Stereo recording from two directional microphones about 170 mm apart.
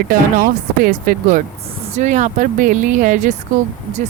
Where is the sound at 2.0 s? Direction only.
45° right (ahead or behind).